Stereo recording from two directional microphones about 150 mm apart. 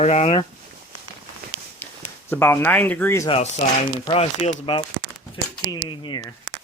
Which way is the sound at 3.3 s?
45° left (ahead or behind).